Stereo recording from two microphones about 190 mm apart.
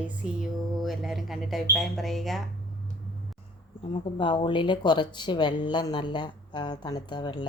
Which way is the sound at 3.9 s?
25° left (ahead or behind).